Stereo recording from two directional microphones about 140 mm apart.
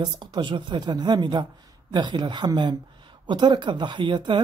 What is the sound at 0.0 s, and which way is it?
A woman's voice, 30° right (ahead or behind).